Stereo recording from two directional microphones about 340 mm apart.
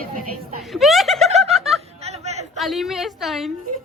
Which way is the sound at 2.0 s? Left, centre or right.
Centre.